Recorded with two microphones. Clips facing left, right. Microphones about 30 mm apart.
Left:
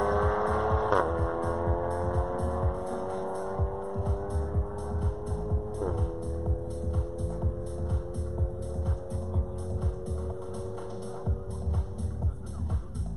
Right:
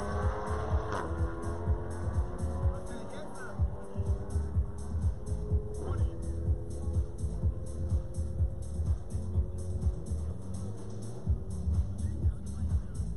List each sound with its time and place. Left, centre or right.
0.0 s vehicle: left
1.6 s music: left
2.3 s music: left